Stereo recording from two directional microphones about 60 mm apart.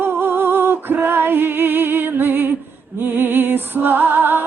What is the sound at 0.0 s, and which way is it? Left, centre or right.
Music, right.